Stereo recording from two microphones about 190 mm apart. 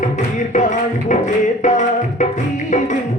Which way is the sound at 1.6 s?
40° left (ahead or behind).